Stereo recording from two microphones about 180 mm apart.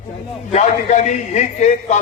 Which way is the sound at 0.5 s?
40° left (ahead or behind).